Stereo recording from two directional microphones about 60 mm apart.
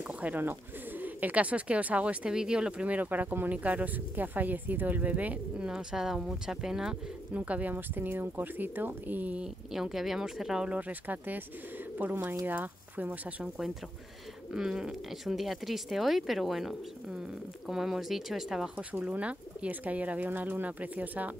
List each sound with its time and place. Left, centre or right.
0.0 s bird: right
0.4 s speech: right; by 7.0 s centre
7.3 s speech: right
7.7 s speech: right
9.4 s speech: centre
10.7 s speech: right
14.5 s speech: centre
18.8 s speech: right